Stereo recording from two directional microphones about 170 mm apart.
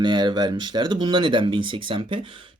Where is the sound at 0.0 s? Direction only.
25° right (ahead or behind).